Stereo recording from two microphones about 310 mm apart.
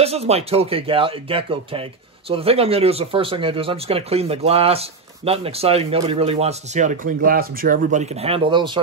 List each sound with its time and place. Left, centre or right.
0.0 s speech: centre